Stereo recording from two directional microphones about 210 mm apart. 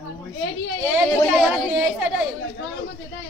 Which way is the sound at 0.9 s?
5° right (ahead or behind).